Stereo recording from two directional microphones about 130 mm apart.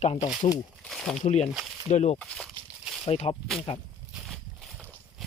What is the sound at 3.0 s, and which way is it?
Speech, 50° left (ahead or behind).